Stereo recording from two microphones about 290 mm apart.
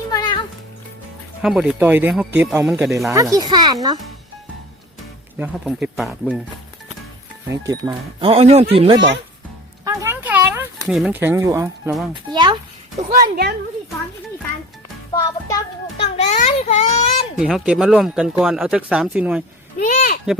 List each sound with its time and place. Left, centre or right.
0.1 s music: centre
1.4 s speech: centre
5.4 s speech: centre
7.7 s speech: centre
9.8 s a sound: centre
12.3 s speech: centre
13.1 s a woman's voice: right
15.1 s a child's voice: centre
16.1 s baby cry: left
17.4 s speech: centre
19.8 s speech: left